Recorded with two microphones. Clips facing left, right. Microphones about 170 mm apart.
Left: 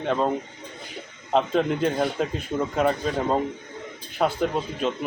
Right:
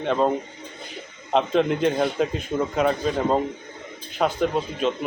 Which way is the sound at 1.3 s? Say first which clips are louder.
Right 1 dB; 5° left (ahead or behind).